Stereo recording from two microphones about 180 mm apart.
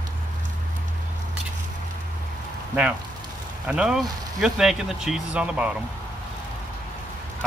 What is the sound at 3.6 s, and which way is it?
Speech, 5° right (ahead or behind).